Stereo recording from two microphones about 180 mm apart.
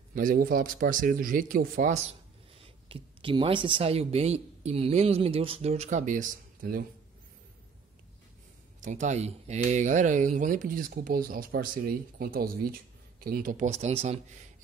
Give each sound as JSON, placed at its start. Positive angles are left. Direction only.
{"t": 0.1, "sound": "speech", "side_deg": -50}
{"t": 2.6, "sound": "speech", "side_deg": -30}
{"t": 8.8, "sound": "speech", "side_deg": -40}